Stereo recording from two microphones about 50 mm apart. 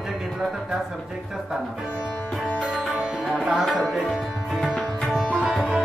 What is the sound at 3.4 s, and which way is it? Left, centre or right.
Tabla, centre.